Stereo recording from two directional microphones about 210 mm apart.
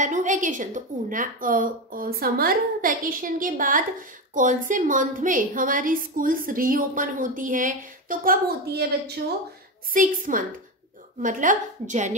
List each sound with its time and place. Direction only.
0.0 s a woman's voice: 35° right (ahead or behind)